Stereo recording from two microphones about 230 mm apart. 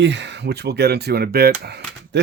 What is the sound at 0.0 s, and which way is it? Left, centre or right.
Speech, right.